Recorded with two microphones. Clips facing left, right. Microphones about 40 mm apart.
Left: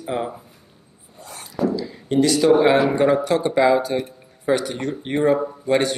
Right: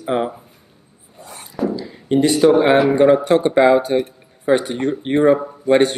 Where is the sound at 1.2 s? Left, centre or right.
Right.